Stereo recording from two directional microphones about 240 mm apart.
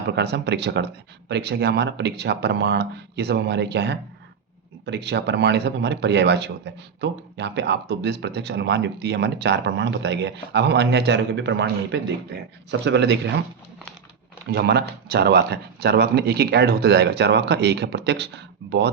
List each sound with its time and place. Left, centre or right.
0.2 s speech: right
14.5 s speech: right